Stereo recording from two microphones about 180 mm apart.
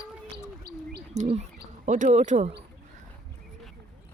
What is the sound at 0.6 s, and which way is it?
Bird, 60° right (ahead or behind).